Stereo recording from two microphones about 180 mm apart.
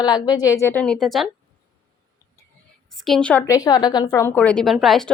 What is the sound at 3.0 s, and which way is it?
Speech, 5° left (ahead or behind).